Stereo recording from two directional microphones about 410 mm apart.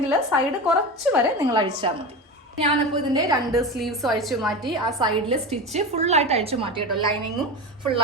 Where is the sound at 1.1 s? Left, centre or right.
Centre.